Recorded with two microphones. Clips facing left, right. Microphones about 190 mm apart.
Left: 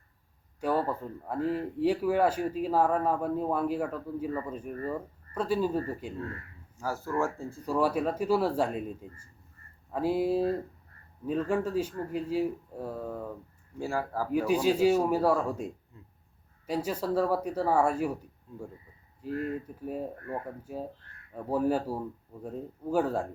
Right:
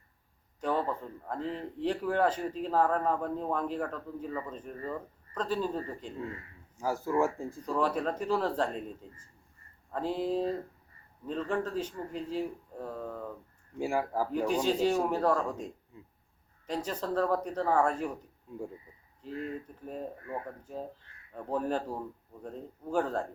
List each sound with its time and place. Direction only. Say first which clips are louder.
0.6 s speech: left 2 dB; 10° left (ahead or behind)
6.7 s speech: right 2 dB; 15° right (ahead or behind)
7.6 s speech: left 3 dB; 10° left (ahead or behind)
13.7 s speech: right 1 dB; 15° right (ahead or behind)
14.3 s speech: left 7 dB; 10° left (ahead or behind)
18.5 s speech: right 2 dB; 15° right (ahead or behind)
19.4 s speech: left 3 dB; 10° left (ahead or behind)